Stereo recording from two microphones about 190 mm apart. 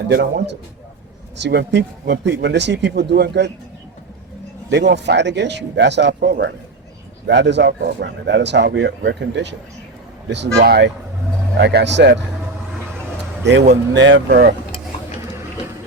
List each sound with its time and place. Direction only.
0.1 s speech: 60° right (ahead or behind)
4.7 s speech: 65° right (ahead or behind)
13.4 s speech: 65° right (ahead or behind)